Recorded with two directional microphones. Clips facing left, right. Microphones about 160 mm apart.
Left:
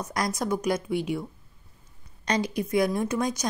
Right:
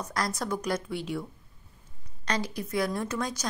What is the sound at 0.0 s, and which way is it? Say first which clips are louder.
A woman's voice: left 3 dB; 15° left (ahead or behind).